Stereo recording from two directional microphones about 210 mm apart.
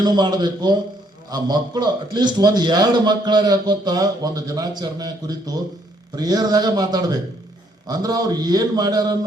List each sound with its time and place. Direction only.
0.0 s a man's voice: 20° right (ahead or behind)